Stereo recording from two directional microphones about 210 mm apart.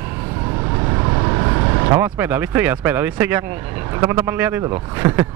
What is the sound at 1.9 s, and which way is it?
Speech, 10° right (ahead or behind).